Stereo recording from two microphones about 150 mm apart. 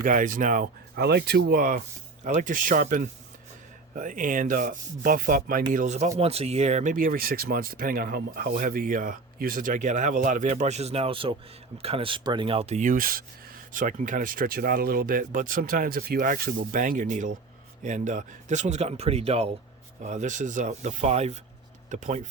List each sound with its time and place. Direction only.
0.0 s speech: 60° right (ahead or behind)
2.2 s speech: 60° right (ahead or behind)
5.7 s speech: 50° right (ahead or behind); by 13.2 s 70° right (ahead or behind)
13.7 s speech: 60° right (ahead or behind); by 19.5 s 40° right (ahead or behind)
20.0 s speech: 55° right (ahead or behind)